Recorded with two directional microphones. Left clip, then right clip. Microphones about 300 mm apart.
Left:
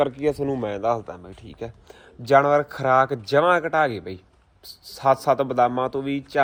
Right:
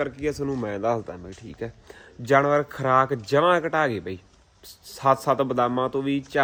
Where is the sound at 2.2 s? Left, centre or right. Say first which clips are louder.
Left 3 dB; centre.